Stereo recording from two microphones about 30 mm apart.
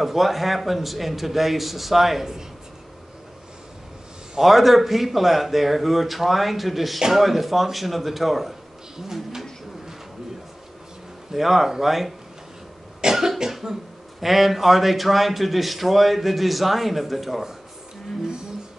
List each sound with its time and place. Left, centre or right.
0.0 s a man's voice: centre
4.4 s a man's voice: centre
8.9 s a sound: centre
11.3 s a man's voice: centre
13.0 s cough: right
13.5 s cough: centre
14.2 s a man's voice: centre